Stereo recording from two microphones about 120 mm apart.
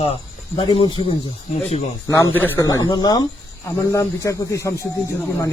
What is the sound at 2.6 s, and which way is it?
Speech, 30° left (ahead or behind).